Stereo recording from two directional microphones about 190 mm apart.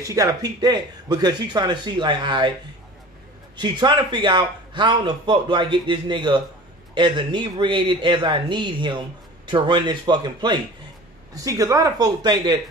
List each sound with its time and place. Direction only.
0.0 s a man's voice: 15° right (ahead or behind)
3.5 s a man's voice: 25° right (ahead or behind)